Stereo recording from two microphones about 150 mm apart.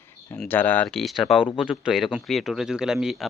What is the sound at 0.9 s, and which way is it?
Speech, centre (ahead or behind).